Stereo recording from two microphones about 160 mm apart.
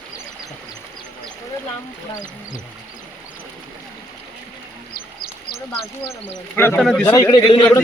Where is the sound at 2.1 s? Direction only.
50° left (ahead or behind).